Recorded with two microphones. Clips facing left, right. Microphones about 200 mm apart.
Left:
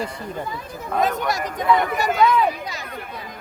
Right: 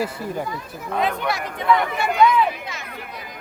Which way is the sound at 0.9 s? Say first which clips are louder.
Left 1 dB; 45° left (ahead or behind).